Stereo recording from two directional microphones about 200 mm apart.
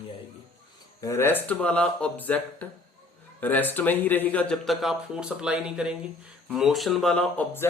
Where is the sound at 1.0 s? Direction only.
15° left (ahead or behind).